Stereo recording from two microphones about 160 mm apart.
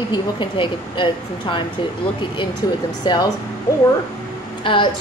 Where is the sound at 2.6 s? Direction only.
25° left (ahead or behind).